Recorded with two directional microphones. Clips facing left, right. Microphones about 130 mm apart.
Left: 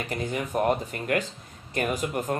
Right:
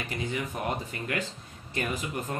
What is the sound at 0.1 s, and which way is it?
Speech, 50° left (ahead or behind).